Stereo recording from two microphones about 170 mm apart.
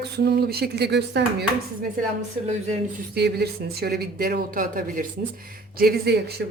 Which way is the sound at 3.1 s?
70° right (ahead or behind).